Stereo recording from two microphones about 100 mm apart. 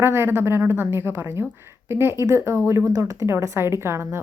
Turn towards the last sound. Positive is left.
turn(degrees=-25)  # may be behind; listen again after turning